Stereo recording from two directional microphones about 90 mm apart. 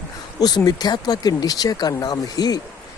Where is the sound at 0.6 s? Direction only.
50° left (ahead or behind).